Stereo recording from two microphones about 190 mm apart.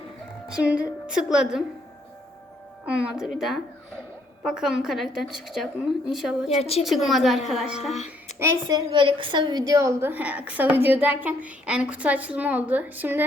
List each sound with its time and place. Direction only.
0.4 s a woman's voice: 5° right (ahead or behind)
2.8 s a woman's voice: 5° right (ahead or behind)
6.6 s a woman's voice: 30° left (ahead or behind)
6.8 s a woman's voice: centre (ahead or behind)
7.9 s a sound: 35° left (ahead or behind)
8.4 s a woman's voice: 15° right (ahead or behind)
8.9 s a woman's voice: 25° right (ahead or behind); by 13.2 s 10° right (ahead or behind)